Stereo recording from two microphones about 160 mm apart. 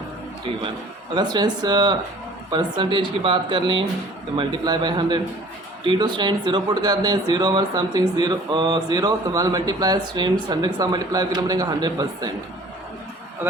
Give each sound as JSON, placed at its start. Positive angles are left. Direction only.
{"t": 1.1, "sound": "speech", "side_deg": -25}